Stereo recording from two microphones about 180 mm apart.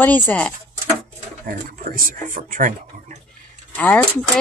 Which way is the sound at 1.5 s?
50° right (ahead or behind).